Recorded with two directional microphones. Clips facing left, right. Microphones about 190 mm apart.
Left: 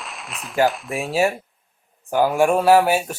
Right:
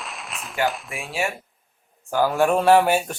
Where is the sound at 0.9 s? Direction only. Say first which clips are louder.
Left 7 dB; 40° left (ahead or behind).